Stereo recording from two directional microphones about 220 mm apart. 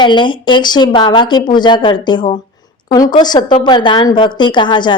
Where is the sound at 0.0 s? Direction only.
20° left (ahead or behind).